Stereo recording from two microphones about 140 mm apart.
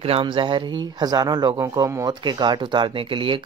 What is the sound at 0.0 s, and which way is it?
Speech, 40° right (ahead or behind).